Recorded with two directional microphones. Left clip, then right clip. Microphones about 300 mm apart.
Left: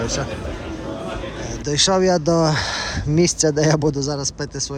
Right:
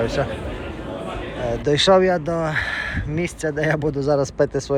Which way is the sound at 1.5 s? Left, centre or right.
Centre.